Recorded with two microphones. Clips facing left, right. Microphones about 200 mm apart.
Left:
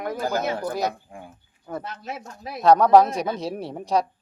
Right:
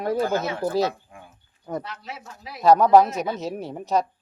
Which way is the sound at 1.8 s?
45° left (ahead or behind).